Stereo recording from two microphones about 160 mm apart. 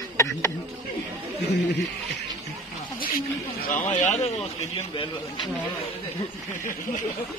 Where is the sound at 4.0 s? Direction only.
45° left (ahead or behind).